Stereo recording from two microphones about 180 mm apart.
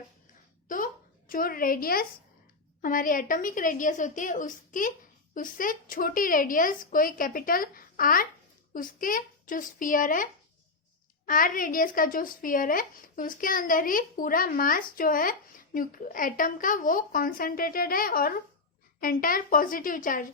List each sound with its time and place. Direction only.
1.3 s speech: 55° left (ahead or behind)
11.3 s speech: 50° left (ahead or behind)